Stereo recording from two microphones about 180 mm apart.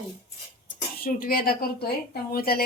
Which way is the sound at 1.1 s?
50° left (ahead or behind).